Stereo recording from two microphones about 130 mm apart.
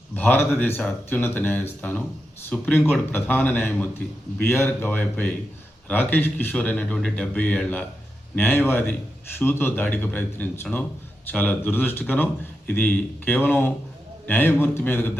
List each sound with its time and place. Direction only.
0.2 s a man's voice: 15° left (ahead or behind)